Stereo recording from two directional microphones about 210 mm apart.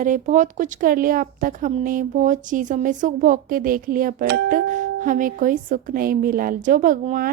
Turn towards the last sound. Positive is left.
turn(degrees=-40)  # may be behind; listen again after turning